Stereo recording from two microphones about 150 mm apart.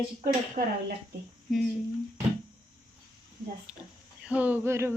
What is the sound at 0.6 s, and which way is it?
Speech, 50° right (ahead or behind).